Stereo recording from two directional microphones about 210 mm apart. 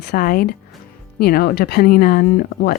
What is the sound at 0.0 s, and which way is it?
Speech, 45° left (ahead or behind).